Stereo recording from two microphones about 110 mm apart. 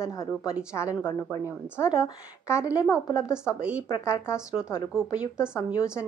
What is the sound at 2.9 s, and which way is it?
A woman's voice, 30° left (ahead or behind).